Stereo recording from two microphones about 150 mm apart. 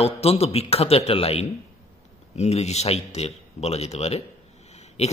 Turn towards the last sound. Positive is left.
turn(degrees=45)  # may be behind; listen again after turning